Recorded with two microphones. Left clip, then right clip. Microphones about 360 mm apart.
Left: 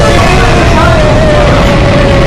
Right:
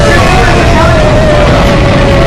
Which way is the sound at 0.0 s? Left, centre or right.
Centre.